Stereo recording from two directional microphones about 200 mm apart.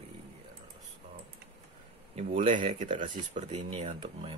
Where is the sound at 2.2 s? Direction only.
35° right (ahead or behind).